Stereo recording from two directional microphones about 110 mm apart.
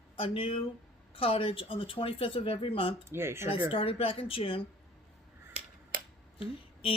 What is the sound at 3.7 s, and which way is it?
Speech, 55° left (ahead or behind).